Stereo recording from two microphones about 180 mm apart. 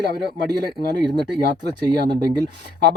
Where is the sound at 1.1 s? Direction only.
65° right (ahead or behind).